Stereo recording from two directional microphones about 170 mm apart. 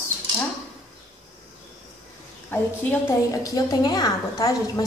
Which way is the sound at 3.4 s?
25° left (ahead or behind).